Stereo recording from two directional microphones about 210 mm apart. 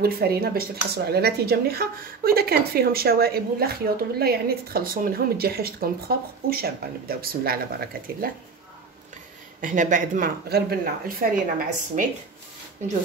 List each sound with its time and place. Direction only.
0.0 s speech: 45° right (ahead or behind)
9.6 s speech: 35° right (ahead or behind)